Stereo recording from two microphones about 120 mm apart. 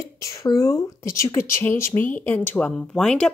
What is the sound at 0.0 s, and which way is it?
Speech, 25° left (ahead or behind).